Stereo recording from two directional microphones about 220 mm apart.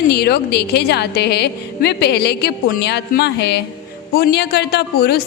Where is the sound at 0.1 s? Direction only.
45° left (ahead or behind).